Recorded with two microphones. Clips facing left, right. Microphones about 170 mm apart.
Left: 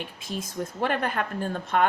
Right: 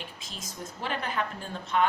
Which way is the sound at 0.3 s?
55° left (ahead or behind).